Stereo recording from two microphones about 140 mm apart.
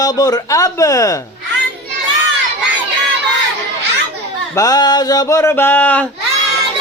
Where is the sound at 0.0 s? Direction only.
25° left (ahead or behind).